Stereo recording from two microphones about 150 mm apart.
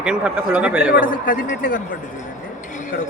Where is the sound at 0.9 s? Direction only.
70° left (ahead or behind).